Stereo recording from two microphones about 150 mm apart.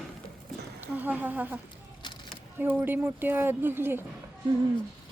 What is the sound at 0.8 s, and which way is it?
Speech, 10° right (ahead or behind).